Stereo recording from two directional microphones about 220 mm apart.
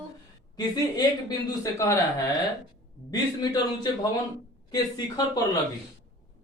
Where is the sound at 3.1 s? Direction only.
15° left (ahead or behind).